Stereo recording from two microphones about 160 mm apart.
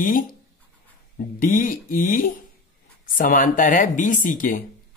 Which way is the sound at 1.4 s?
55° left (ahead or behind).